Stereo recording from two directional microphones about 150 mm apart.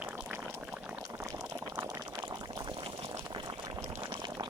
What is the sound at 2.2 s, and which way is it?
Boiling, 30° right (ahead or behind).